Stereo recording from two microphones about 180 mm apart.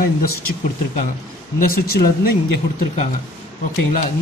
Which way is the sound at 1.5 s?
55° left (ahead or behind).